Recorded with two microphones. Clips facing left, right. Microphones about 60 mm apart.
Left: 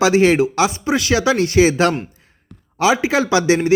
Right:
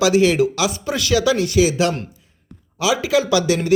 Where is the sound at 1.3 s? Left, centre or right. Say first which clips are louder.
Left 3 dB; left.